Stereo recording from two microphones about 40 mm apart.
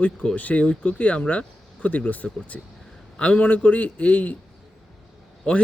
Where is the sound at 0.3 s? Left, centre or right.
Left.